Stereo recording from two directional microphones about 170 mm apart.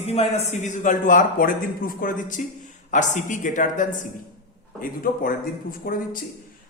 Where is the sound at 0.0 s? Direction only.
35° left (ahead or behind).